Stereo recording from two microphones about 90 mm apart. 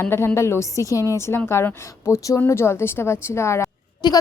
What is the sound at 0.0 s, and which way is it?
A woman's voice, 30° left (ahead or behind).